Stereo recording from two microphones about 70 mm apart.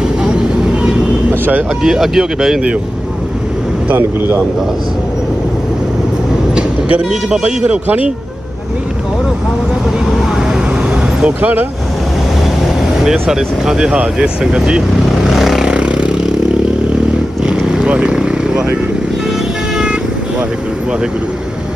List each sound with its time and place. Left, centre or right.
0.2 s vehicle: centre
1.3 s vehicle: right
1.8 s speech: centre
7.1 s speech: centre
11.1 s speech: centre
13.0 s speech: centre
15.2 s vehicle: centre
17.5 s vehicle: centre